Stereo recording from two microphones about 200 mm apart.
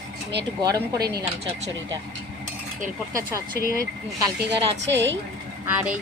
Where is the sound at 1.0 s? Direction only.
50° right (ahead or behind).